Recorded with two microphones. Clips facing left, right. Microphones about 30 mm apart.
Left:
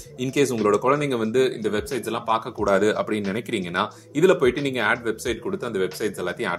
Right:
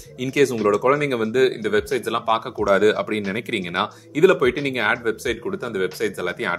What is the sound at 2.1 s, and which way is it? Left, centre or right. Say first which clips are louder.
Speech: right 2 dB; centre.